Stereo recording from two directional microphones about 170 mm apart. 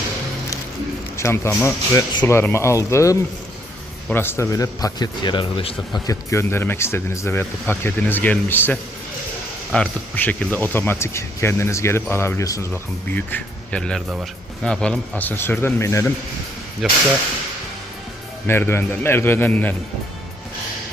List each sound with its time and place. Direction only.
1.1 s speech: 15° left (ahead or behind)
16.8 s speech: centre (ahead or behind)
18.4 s speech: 15° left (ahead or behind)